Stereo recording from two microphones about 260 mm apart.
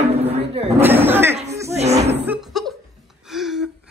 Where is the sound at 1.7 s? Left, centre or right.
Right.